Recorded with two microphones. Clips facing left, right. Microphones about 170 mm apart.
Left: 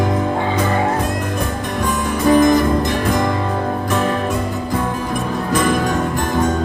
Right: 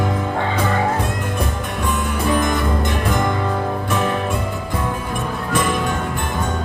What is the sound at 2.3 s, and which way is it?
Music, 40° left (ahead or behind).